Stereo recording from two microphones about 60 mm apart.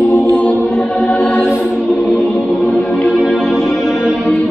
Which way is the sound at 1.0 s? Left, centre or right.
Centre.